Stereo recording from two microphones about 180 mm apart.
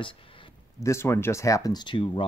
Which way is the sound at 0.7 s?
15° left (ahead or behind).